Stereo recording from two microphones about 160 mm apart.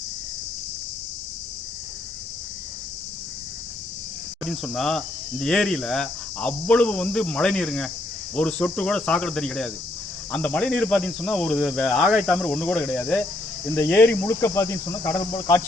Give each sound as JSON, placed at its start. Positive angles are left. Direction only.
{"t": 4.4, "sound": "speech", "side_deg": 0}